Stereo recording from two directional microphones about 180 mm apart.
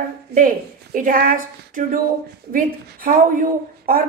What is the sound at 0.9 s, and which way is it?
Speech, 50° right (ahead or behind).